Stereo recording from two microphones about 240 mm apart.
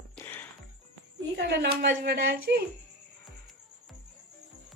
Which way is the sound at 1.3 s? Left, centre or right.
Right.